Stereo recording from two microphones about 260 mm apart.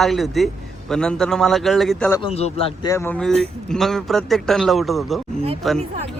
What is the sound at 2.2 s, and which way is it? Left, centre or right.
Speech, left.